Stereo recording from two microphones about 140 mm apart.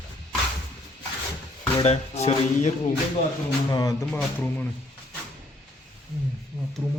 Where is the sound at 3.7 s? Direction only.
25° left (ahead or behind).